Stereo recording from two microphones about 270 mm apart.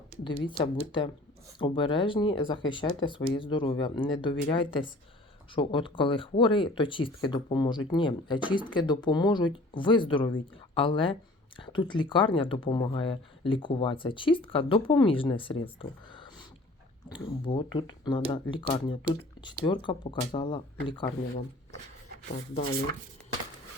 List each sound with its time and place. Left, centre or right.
0.3 s speech: centre